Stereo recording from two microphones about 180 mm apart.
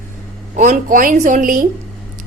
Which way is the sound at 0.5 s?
45° right (ahead or behind).